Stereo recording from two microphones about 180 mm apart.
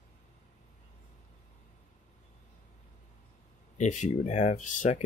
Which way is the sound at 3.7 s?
45° left (ahead or behind).